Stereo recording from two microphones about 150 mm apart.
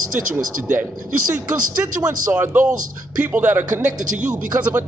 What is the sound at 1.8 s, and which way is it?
Speech, 10° right (ahead or behind).